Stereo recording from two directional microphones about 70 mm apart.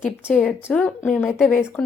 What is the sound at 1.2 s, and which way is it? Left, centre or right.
Speech, centre.